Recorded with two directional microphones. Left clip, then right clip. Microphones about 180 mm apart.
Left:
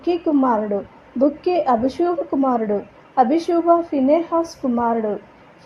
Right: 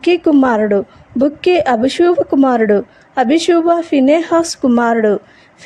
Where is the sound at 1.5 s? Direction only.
40° right (ahead or behind).